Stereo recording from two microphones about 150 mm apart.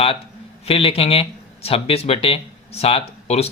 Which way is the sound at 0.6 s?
40° left (ahead or behind).